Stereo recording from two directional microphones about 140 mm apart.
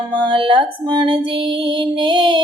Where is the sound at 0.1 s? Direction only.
35° right (ahead or behind).